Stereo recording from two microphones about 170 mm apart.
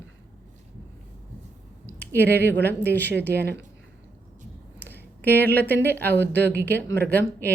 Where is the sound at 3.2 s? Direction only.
80° right.